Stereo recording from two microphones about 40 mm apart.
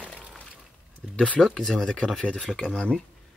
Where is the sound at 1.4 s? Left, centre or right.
Centre.